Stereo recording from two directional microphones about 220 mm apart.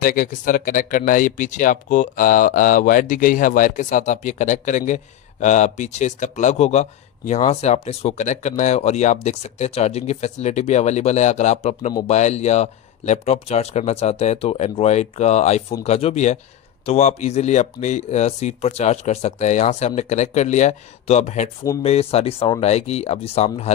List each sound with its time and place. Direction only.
0.0 s speech: 40° left (ahead or behind)